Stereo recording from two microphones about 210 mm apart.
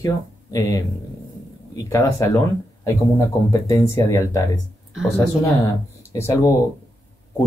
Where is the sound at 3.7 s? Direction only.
15° left (ahead or behind).